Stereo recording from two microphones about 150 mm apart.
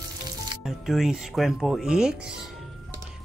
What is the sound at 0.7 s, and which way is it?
Speech, centre (ahead or behind).